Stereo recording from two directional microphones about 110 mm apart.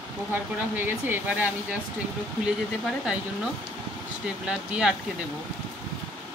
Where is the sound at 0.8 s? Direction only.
15° right (ahead or behind).